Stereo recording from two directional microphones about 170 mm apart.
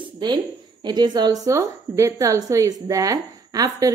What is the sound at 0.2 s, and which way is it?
A woman's voice, 25° right (ahead or behind).